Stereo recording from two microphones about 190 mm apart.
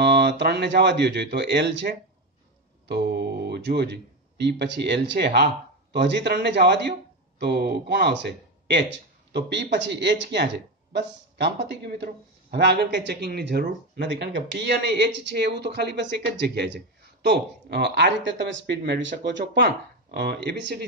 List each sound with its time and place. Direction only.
0.0 s speech: 60° right (ahead or behind)